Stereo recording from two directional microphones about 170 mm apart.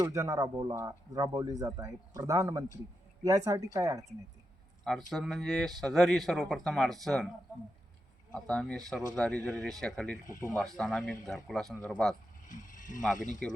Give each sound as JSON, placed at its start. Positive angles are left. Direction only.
{"t": 0.0, "sound": "a woman's voice", "side_deg": -20}
{"t": 4.8, "sound": "speech", "side_deg": 0}
{"t": 8.3, "sound": "speech", "side_deg": 5}
{"t": 12.5, "sound": "vehicle", "side_deg": 50}
{"t": 13.1, "sound": "speech", "side_deg": 50}